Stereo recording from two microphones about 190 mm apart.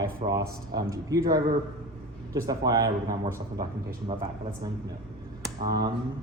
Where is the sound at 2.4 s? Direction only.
20° right (ahead or behind).